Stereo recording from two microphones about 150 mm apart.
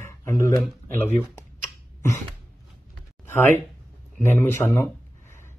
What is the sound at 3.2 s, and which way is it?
Speech, 15° left (ahead or behind).